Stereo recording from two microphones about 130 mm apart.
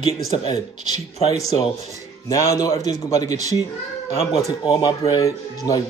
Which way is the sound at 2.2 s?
25° left (ahead or behind).